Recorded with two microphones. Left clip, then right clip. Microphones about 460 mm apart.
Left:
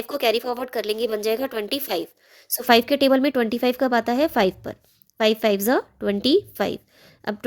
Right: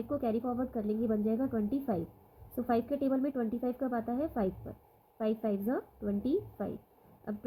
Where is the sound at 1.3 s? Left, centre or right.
Left.